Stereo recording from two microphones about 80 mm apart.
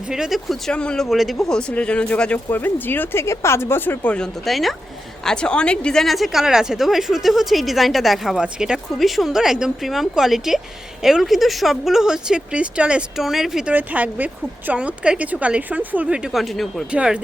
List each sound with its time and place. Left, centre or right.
0.1 s a woman's voice: centre
0.7 s speech: centre
1.1 s speech: centre
2.5 s speech: left
4.1 s a woman's voice: centre
13.7 s a woman's voice: centre
16.4 s a woman's voice: centre
16.9 s a woman's voice: centre